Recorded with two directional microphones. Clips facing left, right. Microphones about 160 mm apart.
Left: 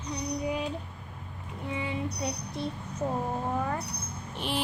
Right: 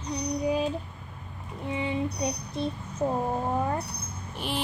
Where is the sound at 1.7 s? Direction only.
25° right (ahead or behind).